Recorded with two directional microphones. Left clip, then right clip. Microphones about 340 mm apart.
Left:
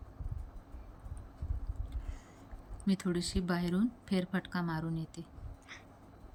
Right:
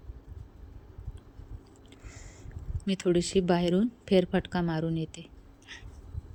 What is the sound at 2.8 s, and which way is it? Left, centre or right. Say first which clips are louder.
Speech: right 8 dB; centre.